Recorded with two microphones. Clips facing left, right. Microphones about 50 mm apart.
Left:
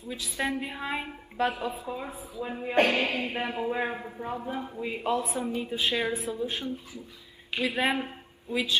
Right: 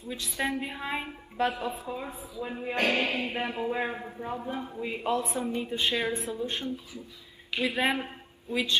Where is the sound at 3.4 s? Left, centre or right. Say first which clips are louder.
Left 1 dB; left.